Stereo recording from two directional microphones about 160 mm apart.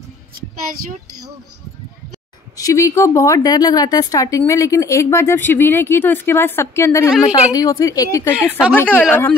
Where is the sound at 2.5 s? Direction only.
20° left (ahead or behind).